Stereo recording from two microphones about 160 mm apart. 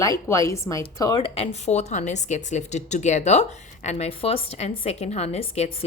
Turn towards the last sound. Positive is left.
turn(degrees=45)  # may be behind; listen again after turning